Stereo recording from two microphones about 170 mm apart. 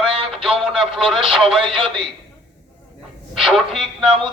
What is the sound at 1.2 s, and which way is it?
Speech, 30° right (ahead or behind).